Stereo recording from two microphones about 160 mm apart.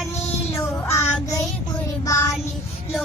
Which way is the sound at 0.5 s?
15° left (ahead or behind).